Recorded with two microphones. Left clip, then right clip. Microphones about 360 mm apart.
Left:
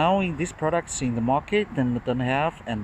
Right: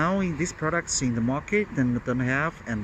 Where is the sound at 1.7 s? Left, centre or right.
Left.